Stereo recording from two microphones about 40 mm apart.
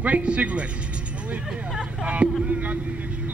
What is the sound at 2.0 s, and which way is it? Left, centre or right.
Speech, right.